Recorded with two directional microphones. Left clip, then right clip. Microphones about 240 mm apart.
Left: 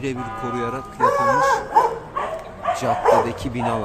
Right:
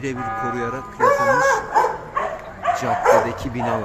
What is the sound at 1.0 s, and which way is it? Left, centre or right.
Speech, right.